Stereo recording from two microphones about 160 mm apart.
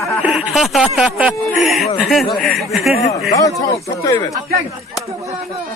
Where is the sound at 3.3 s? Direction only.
20° left (ahead or behind).